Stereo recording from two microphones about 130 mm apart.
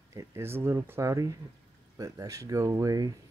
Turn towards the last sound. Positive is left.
turn(degrees=-25)  # may be behind; listen again after turning